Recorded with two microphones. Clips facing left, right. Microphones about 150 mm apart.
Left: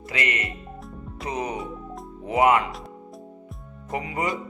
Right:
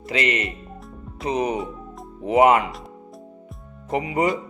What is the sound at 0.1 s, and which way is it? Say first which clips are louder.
A man's voice: right 5 dB; 25° right (ahead or behind).